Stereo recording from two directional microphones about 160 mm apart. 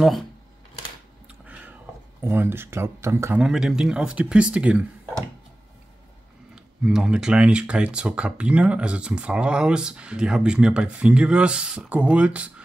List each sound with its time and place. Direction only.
1.2 s a sound: 10° right (ahead or behind)
2.2 s speech: 15° right (ahead or behind)
3.3 s speech: 5° right (ahead or behind)
6.5 s speech: 5° right (ahead or behind)